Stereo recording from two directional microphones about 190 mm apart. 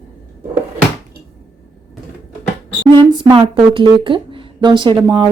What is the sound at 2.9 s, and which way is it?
Speech, 25° right (ahead or behind).